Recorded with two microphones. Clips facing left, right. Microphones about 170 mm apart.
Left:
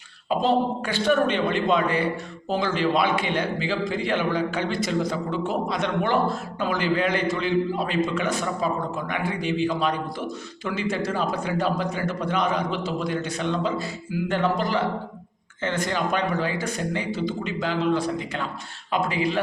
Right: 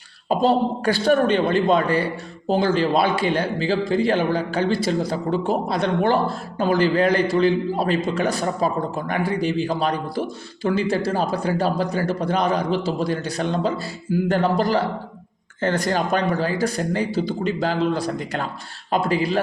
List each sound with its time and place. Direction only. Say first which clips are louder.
0.3 s a man's voice: right 3 dB; 35° right (ahead or behind)